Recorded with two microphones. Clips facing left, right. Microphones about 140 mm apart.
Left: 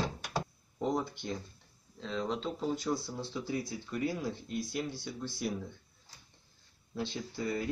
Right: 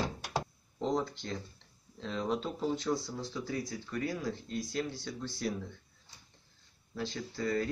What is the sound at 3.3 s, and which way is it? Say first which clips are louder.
Speech: left 2 dB; 20° left (ahead or behind).